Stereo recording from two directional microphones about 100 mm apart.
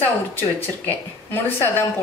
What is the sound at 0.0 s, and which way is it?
Speech, 20° left (ahead or behind).